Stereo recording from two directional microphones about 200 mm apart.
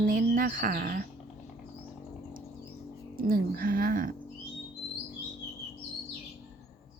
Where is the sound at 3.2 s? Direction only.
45° right (ahead or behind).